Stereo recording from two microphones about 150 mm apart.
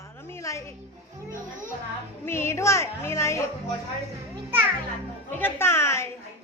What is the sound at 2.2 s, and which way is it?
Music, 15° left (ahead or behind).